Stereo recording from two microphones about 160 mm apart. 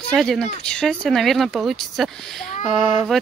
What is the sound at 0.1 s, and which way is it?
Speech, centre (ahead or behind).